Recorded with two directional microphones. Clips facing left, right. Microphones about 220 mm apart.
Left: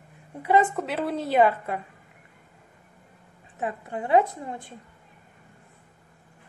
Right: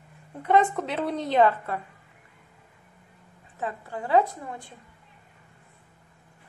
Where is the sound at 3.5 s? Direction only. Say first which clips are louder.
Left 2 dB; 20° left (ahead or behind).